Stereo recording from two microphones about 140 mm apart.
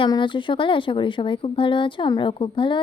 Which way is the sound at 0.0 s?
35° left (ahead or behind).